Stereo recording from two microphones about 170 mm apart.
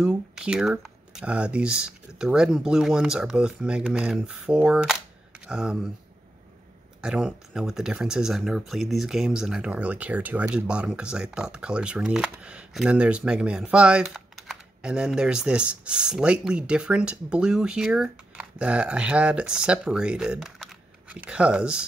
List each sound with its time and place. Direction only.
0.0 s speech: 5° right (ahead or behind)
7.0 s speech: 5° right (ahead or behind)